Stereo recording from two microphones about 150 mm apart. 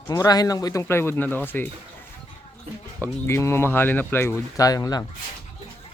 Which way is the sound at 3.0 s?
15° left (ahead or behind).